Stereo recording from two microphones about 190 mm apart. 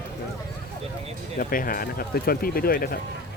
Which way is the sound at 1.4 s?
50° left (ahead or behind).